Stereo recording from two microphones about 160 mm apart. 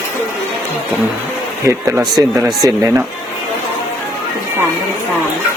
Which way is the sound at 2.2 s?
20° right (ahead or behind).